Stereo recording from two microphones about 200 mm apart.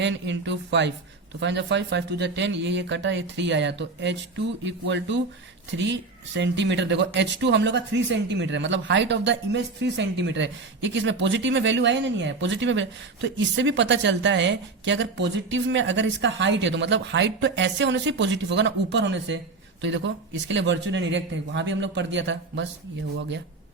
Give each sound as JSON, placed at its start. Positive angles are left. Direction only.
{"t": 0.0, "sound": "speech", "side_deg": -60}